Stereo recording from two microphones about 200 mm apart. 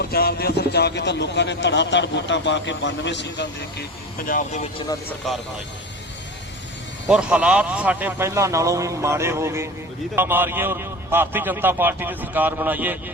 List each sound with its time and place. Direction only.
0.0 s a man's voice: 50° left (ahead or behind)
7.1 s a man's voice: 5° right (ahead or behind)